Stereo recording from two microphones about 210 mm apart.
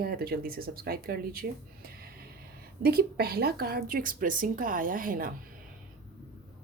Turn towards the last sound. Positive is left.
turn(degrees=-40)  # may be behind; listen again after turning